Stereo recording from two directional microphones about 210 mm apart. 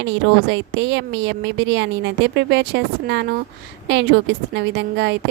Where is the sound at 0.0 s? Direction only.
55° right (ahead or behind).